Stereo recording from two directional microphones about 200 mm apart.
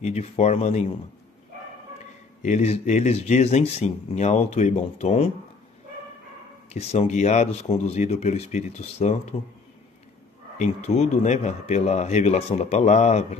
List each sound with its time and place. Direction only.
0.0 s speech: 35° left (ahead or behind)
2.4 s speech: 35° left (ahead or behind)
6.7 s speech: 30° left (ahead or behind)
10.6 s speech: 35° left (ahead or behind)